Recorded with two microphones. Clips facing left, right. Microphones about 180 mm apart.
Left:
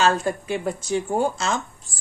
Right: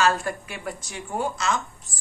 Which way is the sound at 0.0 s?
20° left (ahead or behind).